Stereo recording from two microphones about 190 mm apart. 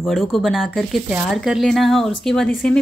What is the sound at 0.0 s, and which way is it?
Speech, centre (ahead or behind).